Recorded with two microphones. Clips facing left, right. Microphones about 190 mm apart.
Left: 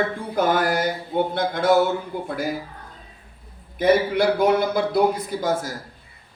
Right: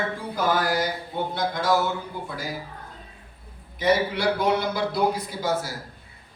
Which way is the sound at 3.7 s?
55° left (ahead or behind).